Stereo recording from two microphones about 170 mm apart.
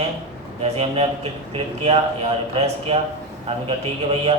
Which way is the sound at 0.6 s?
35° right (ahead or behind).